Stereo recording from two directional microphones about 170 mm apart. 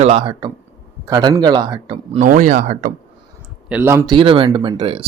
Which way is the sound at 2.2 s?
50° right (ahead or behind).